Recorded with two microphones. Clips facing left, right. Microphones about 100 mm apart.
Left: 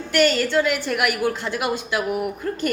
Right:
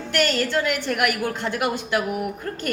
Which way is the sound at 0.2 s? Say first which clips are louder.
Left 4 dB; 45° right (ahead or behind).